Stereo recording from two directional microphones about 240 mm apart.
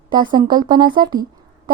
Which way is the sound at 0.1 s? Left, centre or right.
Centre.